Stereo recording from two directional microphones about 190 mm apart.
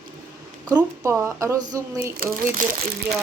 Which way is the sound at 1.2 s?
15° right (ahead or behind).